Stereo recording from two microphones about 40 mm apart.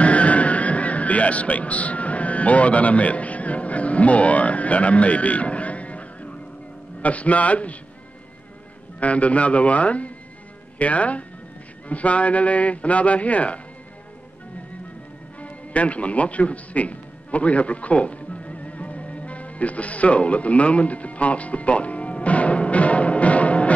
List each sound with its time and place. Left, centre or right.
0.0 s music: left
7.0 s a man's voice: left
9.0 s a man's voice: left
15.4 s music: left